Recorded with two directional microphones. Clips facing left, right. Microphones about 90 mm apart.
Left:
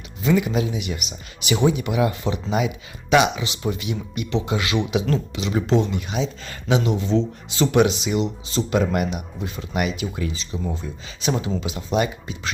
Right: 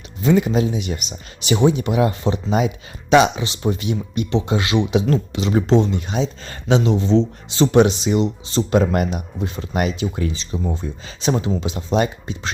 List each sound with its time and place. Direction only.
0.2 s speech: 35° right (ahead or behind)